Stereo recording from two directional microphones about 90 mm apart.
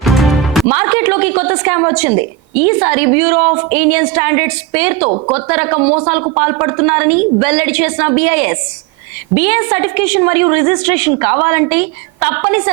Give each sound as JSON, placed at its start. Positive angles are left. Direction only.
{"t": 0.0, "sound": "music", "side_deg": 0}
{"t": 0.7, "sound": "a woman's voice", "side_deg": -25}